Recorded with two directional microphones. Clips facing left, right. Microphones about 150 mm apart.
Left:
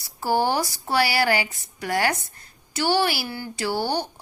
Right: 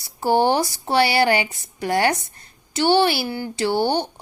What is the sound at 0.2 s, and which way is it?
Speech, 25° right (ahead or behind).